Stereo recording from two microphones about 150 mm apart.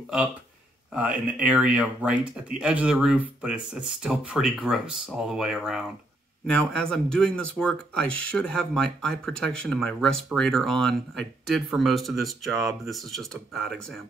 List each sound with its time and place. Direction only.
0.9 s speech: 10° right (ahead or behind)